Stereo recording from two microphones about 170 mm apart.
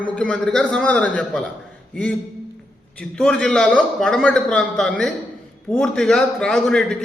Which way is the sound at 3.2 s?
5° left (ahead or behind).